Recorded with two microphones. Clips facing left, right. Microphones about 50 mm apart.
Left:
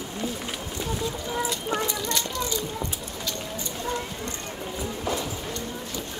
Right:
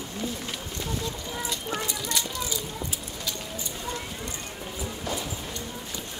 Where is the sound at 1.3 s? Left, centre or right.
Centre.